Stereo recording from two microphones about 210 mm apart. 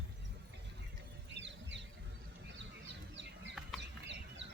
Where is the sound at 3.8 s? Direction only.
60° right (ahead or behind).